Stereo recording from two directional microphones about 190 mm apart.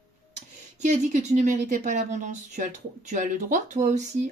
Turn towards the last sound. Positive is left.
turn(degrees=-40)  # may be behind; listen again after turning